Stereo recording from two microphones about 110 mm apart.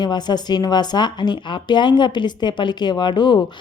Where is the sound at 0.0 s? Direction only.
40° left (ahead or behind).